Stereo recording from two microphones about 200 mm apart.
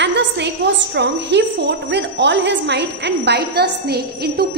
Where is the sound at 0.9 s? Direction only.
60° right (ahead or behind).